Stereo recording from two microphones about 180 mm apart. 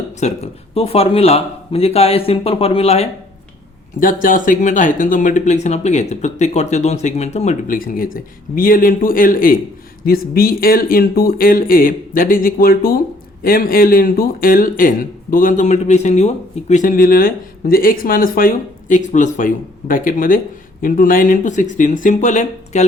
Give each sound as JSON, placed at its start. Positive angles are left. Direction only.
{"t": 0.2, "sound": "speech", "side_deg": 35}
{"t": 4.0, "sound": "speech", "side_deg": 50}